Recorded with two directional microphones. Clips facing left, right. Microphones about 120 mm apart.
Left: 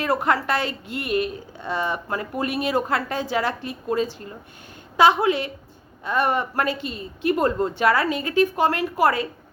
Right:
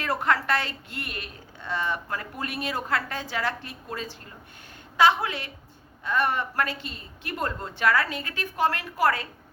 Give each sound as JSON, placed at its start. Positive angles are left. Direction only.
{"t": 0.0, "sound": "a woman's voice", "side_deg": 15}